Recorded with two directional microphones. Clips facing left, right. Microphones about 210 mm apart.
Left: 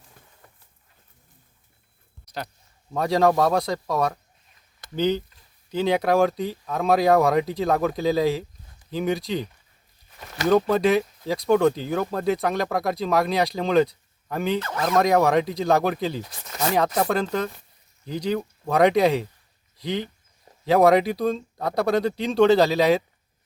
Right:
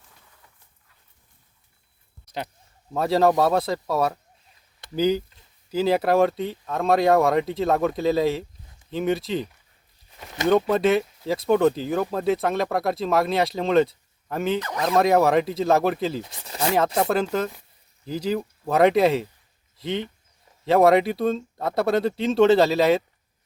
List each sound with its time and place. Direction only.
0.4 s a sound: 50° left (ahead or behind)
2.2 s a sound: 20° right (ahead or behind)
2.9 s speech: 5° right (ahead or behind)
10.5 s speech: centre (ahead or behind)
14.6 s speech: 15° right (ahead or behind)
14.9 s speech: 5° right (ahead or behind)